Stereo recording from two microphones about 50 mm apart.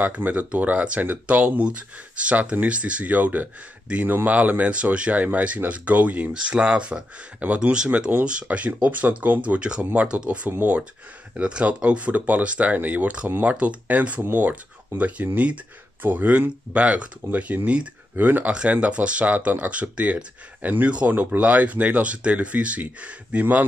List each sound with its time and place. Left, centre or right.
0.0 s speech: right
7.7 s speech: centre; by 9.6 s right
9.6 s speech: centre
10.5 s speech: right
11.3 s speech: right
18.1 s speech: right
18.5 s speech: right
21.1 s speech: right
21.4 s speech: right